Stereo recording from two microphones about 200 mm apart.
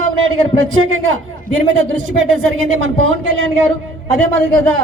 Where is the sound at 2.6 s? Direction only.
85° right.